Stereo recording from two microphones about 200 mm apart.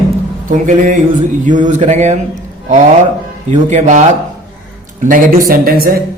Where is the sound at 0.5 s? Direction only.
40° right (ahead or behind).